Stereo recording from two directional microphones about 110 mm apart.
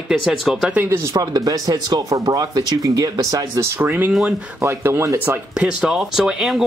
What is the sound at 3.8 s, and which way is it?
Speech, 15° right (ahead or behind).